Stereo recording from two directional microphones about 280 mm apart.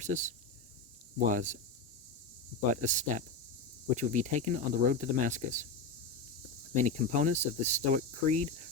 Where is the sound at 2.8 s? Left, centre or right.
Right.